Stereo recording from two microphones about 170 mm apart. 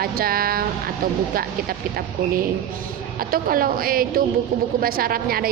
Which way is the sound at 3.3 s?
60° right (ahead or behind).